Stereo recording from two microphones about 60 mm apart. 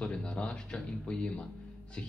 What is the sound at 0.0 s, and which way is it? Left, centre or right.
Speech, centre.